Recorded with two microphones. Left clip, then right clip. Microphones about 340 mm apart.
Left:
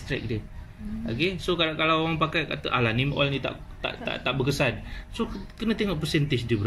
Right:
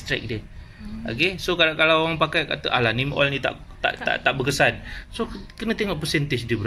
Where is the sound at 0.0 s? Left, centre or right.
Centre.